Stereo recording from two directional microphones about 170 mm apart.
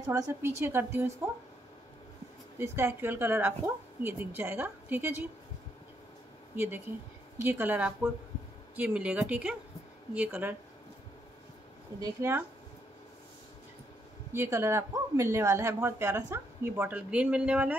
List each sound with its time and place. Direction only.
0.0 s speech: 20° right (ahead or behind)
2.6 s speech: 15° right (ahead or behind)
6.5 s speech: 15° right (ahead or behind)
12.0 s speech: 15° right (ahead or behind)
14.3 s speech: 15° right (ahead or behind)